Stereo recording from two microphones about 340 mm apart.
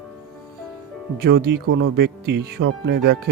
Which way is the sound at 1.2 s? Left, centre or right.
Right.